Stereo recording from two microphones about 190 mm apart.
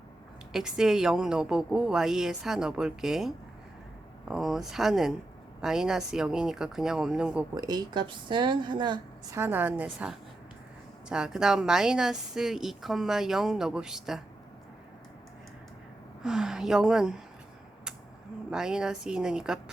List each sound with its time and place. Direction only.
0.5 s a woman's voice: centre (ahead or behind)
7.5 s a woman's voice: 20° right (ahead or behind); by 14.2 s 5° right (ahead or behind)
16.2 s a woman's voice: centre (ahead or behind)
18.5 s a woman's voice: 5° right (ahead or behind)